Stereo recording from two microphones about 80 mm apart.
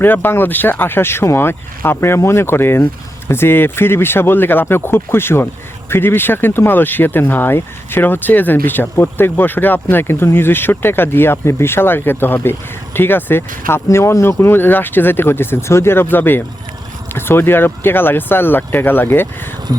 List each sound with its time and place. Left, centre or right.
0.0 s speech: left